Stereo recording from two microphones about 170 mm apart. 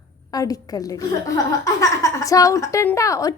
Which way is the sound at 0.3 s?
20° left (ahead or behind).